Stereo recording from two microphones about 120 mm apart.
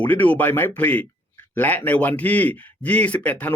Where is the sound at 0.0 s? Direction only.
15° left (ahead or behind).